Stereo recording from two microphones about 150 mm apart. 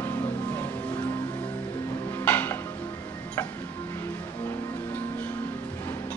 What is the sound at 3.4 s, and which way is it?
Tick-tock, 15° left (ahead or behind).